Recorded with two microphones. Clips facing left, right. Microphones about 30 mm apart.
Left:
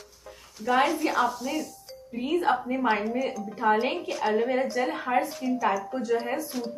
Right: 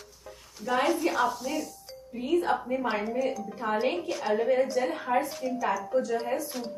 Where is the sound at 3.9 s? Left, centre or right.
Centre.